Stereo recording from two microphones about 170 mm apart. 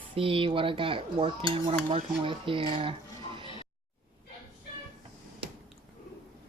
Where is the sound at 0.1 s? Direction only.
30° right (ahead or behind).